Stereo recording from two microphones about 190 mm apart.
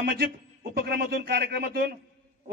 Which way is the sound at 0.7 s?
55° right (ahead or behind).